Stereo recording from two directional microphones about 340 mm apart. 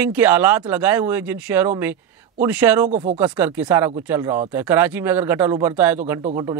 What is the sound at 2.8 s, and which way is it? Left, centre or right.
Speech, centre.